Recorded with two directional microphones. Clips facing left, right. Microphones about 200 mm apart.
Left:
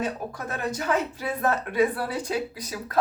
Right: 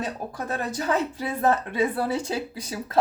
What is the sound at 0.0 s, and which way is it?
Speech, 35° right (ahead or behind).